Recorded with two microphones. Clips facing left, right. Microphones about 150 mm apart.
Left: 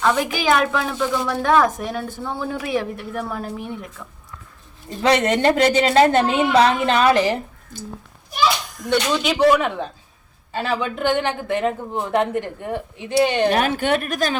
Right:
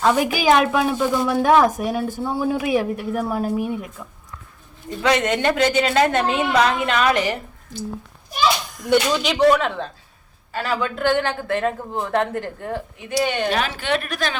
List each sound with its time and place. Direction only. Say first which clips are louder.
0.0 s a woman's voice: right 2 dB; 15° right (ahead or behind)
4.9 s a woman's voice: left 2 dB; 35° left (ahead or behind)
8.9 s a woman's voice: right 1 dB; 5° right (ahead or behind); by 12.8 s 15° left (ahead or behind)
13.1 s a woman's voice: left 4 dB; 30° left (ahead or behind)
13.6 s a woman's voice: left 3 dB; 50° left (ahead or behind)